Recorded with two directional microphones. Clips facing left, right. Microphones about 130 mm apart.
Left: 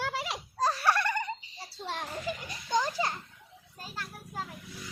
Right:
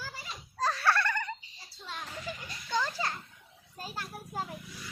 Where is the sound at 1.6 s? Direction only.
65° left (ahead or behind).